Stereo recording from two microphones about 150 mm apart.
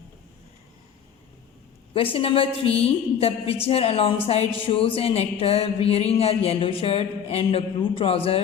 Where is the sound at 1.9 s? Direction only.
35° left (ahead or behind).